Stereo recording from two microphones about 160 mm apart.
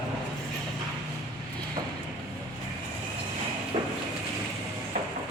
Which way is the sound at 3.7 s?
30° right (ahead or behind).